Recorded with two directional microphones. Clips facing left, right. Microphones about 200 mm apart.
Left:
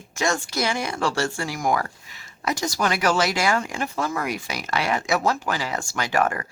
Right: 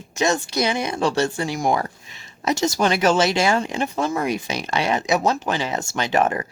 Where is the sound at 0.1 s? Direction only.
20° right (ahead or behind).